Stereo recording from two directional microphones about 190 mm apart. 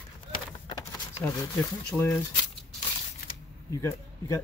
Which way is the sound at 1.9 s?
5° left (ahead or behind).